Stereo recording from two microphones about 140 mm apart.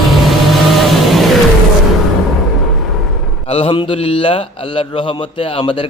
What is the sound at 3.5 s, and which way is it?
Speech, 40° left (ahead or behind).